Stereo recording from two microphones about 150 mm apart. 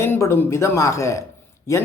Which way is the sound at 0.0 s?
15° left (ahead or behind).